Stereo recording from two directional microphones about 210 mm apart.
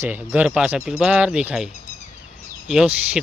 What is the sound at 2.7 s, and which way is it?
Speech, 5° right (ahead or behind).